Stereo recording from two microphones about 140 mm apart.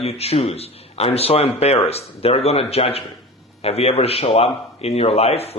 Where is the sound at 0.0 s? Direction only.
45° left (ahead or behind).